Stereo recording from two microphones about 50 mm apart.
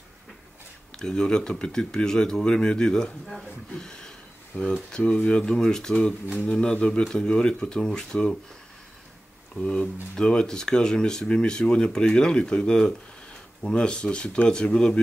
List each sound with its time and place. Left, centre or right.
0.9 s speech: centre
3.7 s a sound: centre
4.5 s speech: left
4.9 s speech: left
9.6 s speech: centre